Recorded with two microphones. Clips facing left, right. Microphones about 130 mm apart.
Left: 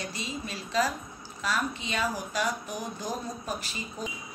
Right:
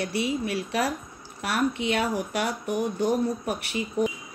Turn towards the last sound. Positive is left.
turn(degrees=-65)  # may be behind; listen again after turning